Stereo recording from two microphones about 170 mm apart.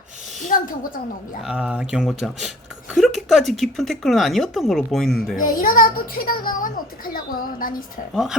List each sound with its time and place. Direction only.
0.4 s a woman's voice: 55° left (ahead or behind)
1.4 s speech: 5° right (ahead or behind)
5.4 s a child's voice: 55° left (ahead or behind)
8.1 s speech: 5° right (ahead or behind)